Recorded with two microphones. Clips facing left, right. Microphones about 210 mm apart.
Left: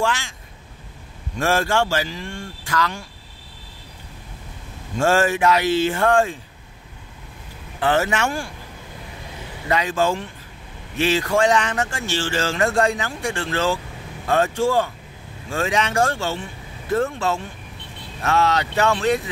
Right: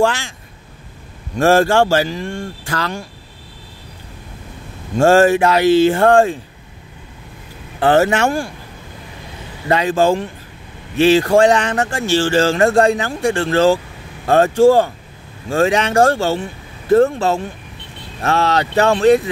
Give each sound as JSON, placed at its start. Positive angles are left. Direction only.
{"t": 1.4, "sound": "speech", "side_deg": -35}
{"t": 4.9, "sound": "speech", "side_deg": -35}
{"t": 7.8, "sound": "speech", "side_deg": -35}
{"t": 9.7, "sound": "speech", "side_deg": -30}